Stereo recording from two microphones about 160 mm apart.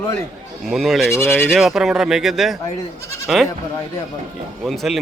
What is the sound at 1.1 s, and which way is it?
Speech, 15° left (ahead or behind).